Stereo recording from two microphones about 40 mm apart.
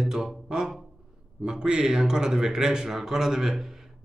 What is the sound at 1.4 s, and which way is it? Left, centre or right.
A man's voice, centre.